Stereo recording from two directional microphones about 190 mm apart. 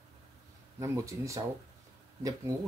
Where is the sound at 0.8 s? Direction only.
15° right (ahead or behind).